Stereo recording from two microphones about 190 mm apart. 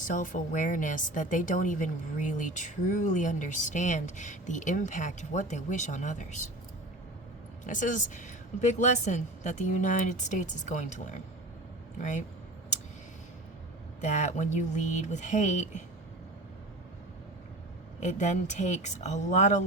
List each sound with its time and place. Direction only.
0.0 s a woman's voice: 45° left (ahead or behind)
7.7 s a woman's voice: 40° left (ahead or behind)
14.0 s a woman's voice: 40° left (ahead or behind)
18.0 s a woman's voice: 40° left (ahead or behind)